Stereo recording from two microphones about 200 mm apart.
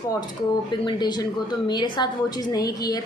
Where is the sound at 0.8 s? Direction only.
20° left (ahead or behind).